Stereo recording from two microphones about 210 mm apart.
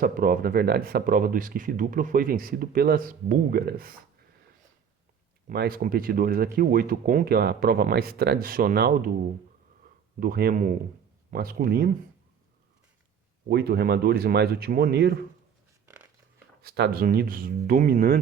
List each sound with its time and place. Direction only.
0.0 s speech: 40° right (ahead or behind)
5.5 s speech: 45° right (ahead or behind)
10.2 s speech: 45° right (ahead or behind)
13.5 s speech: 50° right (ahead or behind)
16.6 s speech: 50° right (ahead or behind)